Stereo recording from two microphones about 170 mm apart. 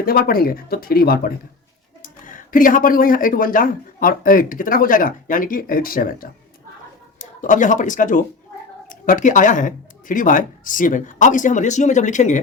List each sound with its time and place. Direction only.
0.0 s speech: 60° left (ahead or behind)